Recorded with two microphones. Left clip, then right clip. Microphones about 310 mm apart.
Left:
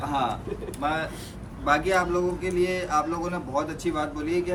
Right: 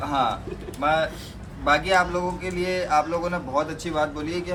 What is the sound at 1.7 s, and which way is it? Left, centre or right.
A man's voice, centre.